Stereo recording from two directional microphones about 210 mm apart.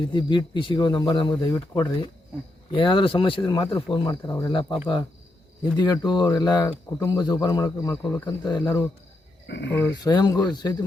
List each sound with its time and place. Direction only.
0.1 s a man's voice: 20° left (ahead or behind)
8.4 s a man's voice: 20° left (ahead or behind)
9.5 s speech: 55° left (ahead or behind)
10.0 s a man's voice: 20° left (ahead or behind)